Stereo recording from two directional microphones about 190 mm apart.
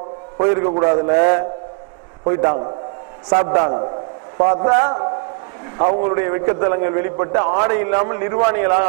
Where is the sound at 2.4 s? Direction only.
30° right (ahead or behind).